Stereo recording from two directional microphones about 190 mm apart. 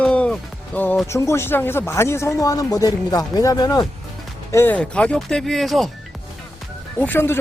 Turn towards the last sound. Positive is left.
turn(degrees=10)  # may be behind; listen again after turning